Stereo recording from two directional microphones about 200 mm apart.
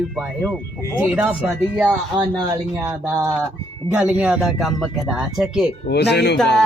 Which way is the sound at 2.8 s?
10° right (ahead or behind).